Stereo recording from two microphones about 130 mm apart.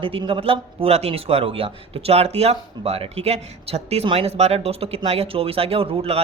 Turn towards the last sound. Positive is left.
turn(degrees=-50)  # may be behind; listen again after turning